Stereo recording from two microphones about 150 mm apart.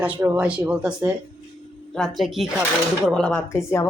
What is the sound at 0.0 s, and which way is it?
Speech, 15° right (ahead or behind).